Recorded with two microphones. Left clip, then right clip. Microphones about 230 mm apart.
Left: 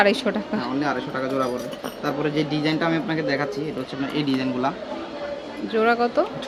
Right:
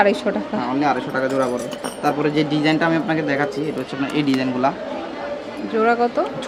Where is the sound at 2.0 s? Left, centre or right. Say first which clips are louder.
Right 5 dB; right.